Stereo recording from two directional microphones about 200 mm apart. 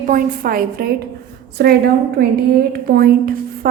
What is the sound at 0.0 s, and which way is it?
A woman's voice, 45° right (ahead or behind).